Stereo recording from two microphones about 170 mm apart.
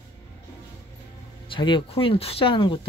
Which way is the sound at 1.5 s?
30° left (ahead or behind).